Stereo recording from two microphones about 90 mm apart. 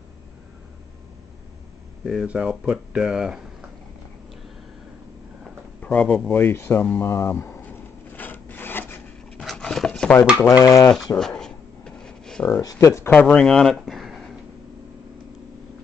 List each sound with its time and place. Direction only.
2.0 s speech: 5° right (ahead or behind)
5.8 s speech: 15° left (ahead or behind)
7.1 s rub: 30° left (ahead or behind)
9.4 s dog: 5° left (ahead or behind)
10.6 s speech: 40° left (ahead or behind)
11.1 s a sound: 5° left (ahead or behind)
12.8 s speech: 35° left (ahead or behind)
13.1 s speech: 15° left (ahead or behind)